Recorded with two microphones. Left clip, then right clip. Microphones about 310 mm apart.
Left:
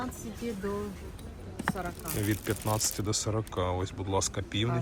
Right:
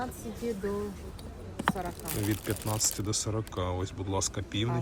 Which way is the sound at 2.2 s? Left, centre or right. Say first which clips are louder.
Left 1 dB; centre.